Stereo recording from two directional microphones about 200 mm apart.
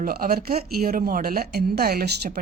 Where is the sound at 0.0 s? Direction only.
45° right (ahead or behind).